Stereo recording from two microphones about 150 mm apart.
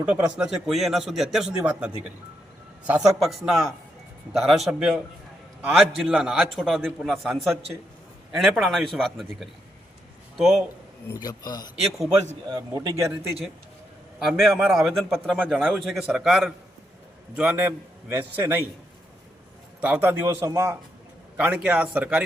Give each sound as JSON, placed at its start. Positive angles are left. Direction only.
{"t": 0.0, "sound": "a man's voice", "side_deg": -10}
{"t": 11.1, "sound": "speech", "side_deg": 25}
{"t": 12.5, "sound": "speech", "side_deg": -25}
{"t": 14.2, "sound": "a man's voice", "side_deg": 0}
{"t": 19.8, "sound": "a man's voice", "side_deg": -10}
{"t": 21.3, "sound": "a man's voice", "side_deg": -10}